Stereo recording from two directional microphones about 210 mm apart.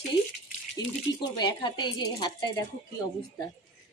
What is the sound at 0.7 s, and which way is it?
Speech, 20° left (ahead or behind).